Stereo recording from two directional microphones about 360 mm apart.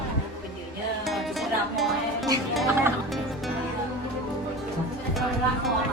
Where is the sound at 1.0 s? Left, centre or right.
Centre.